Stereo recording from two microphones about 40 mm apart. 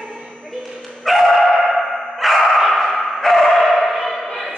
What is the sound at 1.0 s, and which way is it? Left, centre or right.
Dog, centre.